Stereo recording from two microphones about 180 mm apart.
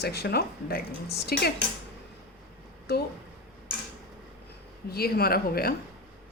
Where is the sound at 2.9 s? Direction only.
65° left (ahead or behind).